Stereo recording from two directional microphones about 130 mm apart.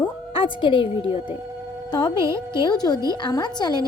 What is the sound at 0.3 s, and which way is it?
A woman's voice, 40° left (ahead or behind).